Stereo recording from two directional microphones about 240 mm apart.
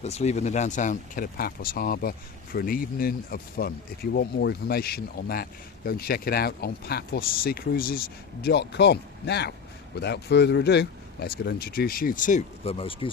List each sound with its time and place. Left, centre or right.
0.0 s speech: left